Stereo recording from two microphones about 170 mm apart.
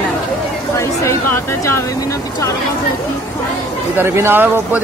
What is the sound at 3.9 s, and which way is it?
Speech, 15° right (ahead or behind).